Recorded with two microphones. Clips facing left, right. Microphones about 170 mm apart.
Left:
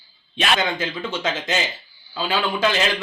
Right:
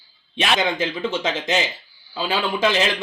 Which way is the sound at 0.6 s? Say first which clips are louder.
Right 2 dB; 15° right (ahead or behind).